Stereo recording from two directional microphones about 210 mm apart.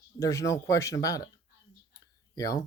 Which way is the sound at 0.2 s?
15° left (ahead or behind).